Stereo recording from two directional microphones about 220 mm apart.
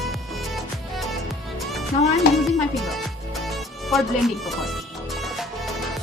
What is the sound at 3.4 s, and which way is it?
Music, centre (ahead or behind).